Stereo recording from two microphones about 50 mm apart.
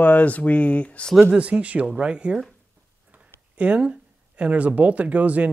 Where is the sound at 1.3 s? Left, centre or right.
Right.